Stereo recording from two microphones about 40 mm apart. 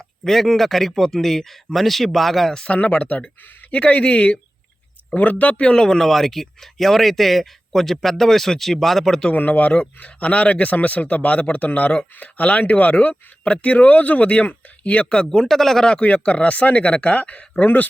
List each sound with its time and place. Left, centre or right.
0.3 s speech: centre
2.6 s speech: left
5.1 s speech: left
5.7 s speech: centre
6.0 s speech: centre
9.3 s speech: left
15.3 s speech: centre
16.0 s speech: left